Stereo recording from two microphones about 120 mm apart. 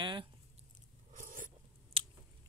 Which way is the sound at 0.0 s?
40° right (ahead or behind).